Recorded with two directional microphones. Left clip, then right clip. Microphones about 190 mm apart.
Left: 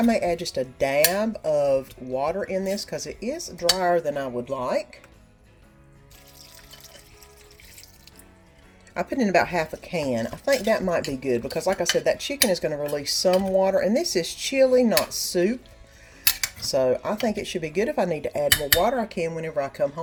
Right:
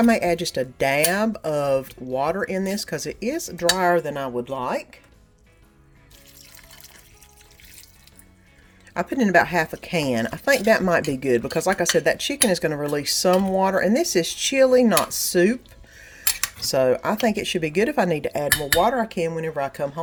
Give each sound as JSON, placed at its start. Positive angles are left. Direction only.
{"t": 0.0, "sound": "speech", "side_deg": -35}
{"t": 3.7, "sound": "cutlery", "side_deg": -35}
{"t": 8.9, "sound": "speech", "side_deg": -30}